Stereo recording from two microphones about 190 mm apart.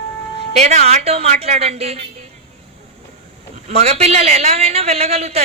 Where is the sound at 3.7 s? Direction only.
35° right (ahead or behind).